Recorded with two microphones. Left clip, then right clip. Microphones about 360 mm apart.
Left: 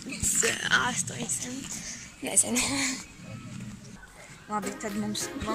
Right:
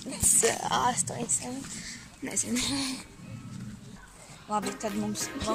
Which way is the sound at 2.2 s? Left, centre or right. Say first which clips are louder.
Left 3 dB; centre.